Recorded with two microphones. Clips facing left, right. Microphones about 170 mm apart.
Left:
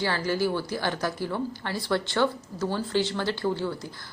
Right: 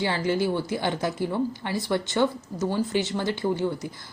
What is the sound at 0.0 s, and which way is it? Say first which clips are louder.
Speech: right 2 dB; 20° right (ahead or behind).